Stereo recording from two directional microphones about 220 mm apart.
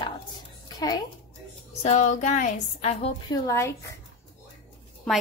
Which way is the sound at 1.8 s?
30° left (ahead or behind).